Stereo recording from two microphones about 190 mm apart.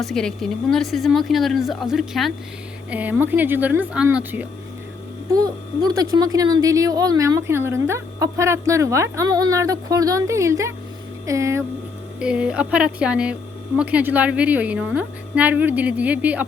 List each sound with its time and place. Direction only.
0.0 s a woman's voice: centre (ahead or behind)
5.3 s a woman's voice: 20° right (ahead or behind)
12.2 s a woman's voice: 5° right (ahead or behind)